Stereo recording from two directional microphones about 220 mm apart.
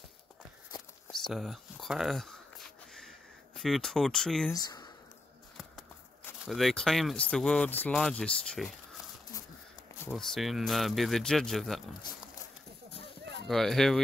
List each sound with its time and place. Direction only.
1.2 s a sound: centre (ahead or behind)
4.6 s speech: 20° left (ahead or behind)
6.4 s speech: centre (ahead or behind)
10.0 s speech: centre (ahead or behind)
13.0 s a sound: 50° right (ahead or behind)
13.5 s speech: centre (ahead or behind)